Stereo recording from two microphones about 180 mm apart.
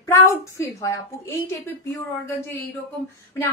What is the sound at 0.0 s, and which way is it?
A woman's voice, 15° left (ahead or behind).